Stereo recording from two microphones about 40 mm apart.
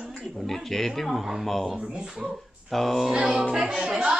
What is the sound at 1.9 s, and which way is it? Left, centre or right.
Speech, right.